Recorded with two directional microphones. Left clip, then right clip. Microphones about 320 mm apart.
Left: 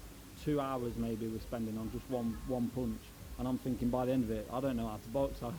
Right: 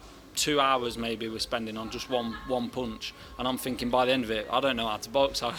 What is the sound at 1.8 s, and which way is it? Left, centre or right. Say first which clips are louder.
Speech: right 9 dB; right.